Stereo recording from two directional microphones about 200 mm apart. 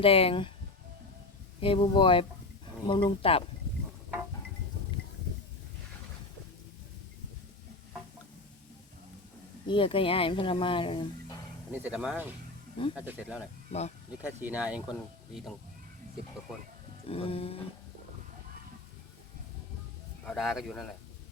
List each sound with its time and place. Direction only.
0.0 s speech: 30° left (ahead or behind)
1.6 s speech: 25° left (ahead or behind)
9.6 s speech: 25° left (ahead or behind)
11.7 s speech: 5° right (ahead or behind)
17.1 s speech: 30° left (ahead or behind)
20.2 s speech: centre (ahead or behind)